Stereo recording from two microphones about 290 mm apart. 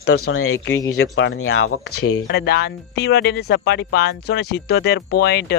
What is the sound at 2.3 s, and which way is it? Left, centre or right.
Speech, left.